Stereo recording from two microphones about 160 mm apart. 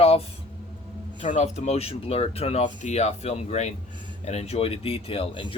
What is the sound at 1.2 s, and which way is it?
Speech, 50° left (ahead or behind).